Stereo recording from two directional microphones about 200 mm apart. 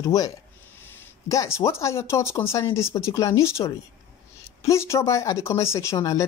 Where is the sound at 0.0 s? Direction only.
15° left (ahead or behind).